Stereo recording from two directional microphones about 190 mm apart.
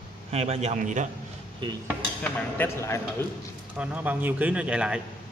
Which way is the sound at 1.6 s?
25° right (ahead or behind).